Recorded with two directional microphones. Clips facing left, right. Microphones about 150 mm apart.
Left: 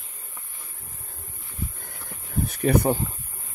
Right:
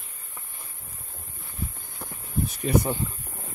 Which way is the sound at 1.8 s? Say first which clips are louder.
Right 1 dB; 55° left (ahead or behind).